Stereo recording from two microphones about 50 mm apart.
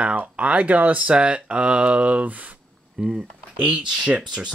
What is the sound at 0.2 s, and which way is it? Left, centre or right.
Speech, right.